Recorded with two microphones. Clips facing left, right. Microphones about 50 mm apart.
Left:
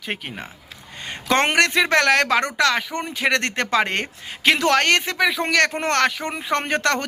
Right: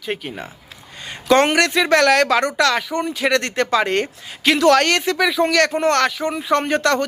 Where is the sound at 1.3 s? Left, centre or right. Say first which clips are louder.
Right 3 dB; left.